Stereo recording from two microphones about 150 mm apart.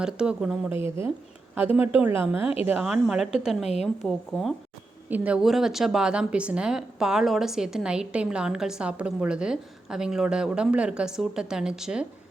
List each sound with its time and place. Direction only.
0.0 s a woman's voice: 5° right (ahead or behind)
0.8 s a woman's voice: 20° right (ahead or behind); by 4.5 s centre (ahead or behind)
5.0 s a woman's voice: 10° right (ahead or behind)